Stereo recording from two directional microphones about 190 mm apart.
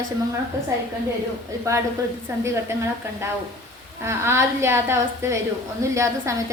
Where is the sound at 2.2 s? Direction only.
15° right (ahead or behind).